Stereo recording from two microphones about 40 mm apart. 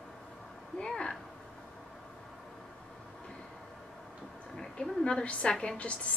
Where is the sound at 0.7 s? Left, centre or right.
Left.